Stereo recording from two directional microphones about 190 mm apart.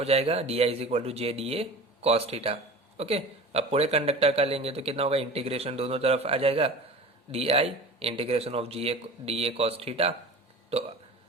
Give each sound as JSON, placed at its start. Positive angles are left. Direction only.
{"t": 0.0, "sound": "speech", "side_deg": -30}